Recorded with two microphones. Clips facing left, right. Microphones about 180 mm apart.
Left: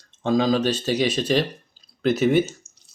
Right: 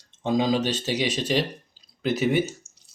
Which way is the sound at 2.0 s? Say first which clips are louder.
Left 4 dB; 50° left (ahead or behind).